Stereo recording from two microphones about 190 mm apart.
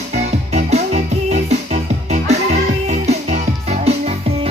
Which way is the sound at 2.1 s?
35° right (ahead or behind).